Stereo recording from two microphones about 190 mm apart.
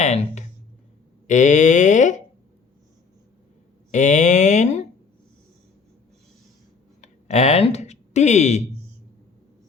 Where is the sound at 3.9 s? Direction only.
40° left (ahead or behind).